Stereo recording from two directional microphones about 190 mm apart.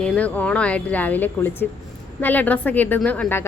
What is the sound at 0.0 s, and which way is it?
A woman's voice, 5° left (ahead or behind).